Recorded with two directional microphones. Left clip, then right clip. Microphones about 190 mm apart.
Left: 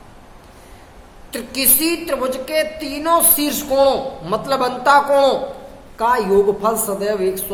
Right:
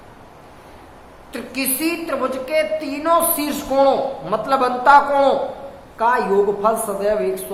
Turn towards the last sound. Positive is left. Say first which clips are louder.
# even
turn(degrees=30)  # may be behind; listen again after turning